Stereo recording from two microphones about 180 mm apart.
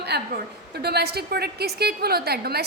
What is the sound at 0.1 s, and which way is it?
A woman's voice, 65° right (ahead or behind).